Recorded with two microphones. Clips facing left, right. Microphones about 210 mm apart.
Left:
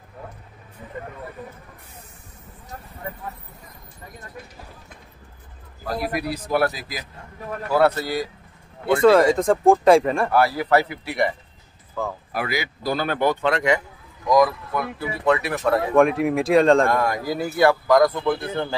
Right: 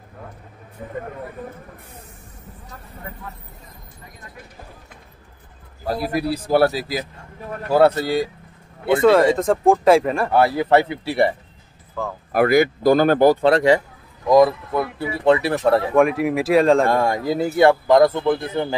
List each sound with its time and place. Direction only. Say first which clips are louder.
0.8 s speech: right 6 dB; 55° right (ahead or behind)
5.9 s speech: right 4 dB; 25° right (ahead or behind)
9.0 s speech: even; centre (ahead or behind)
10.3 s speech: right 4 dB; 25° right (ahead or behind)
12.0 s speech: even; 5° left (ahead or behind)
12.3 s speech: right 11 dB; 50° right (ahead or behind); by 15.8 s 30° right (ahead or behind)
15.9 s speech: even; 5° right (ahead or behind)
16.9 s speech: right 3 dB; 25° right (ahead or behind)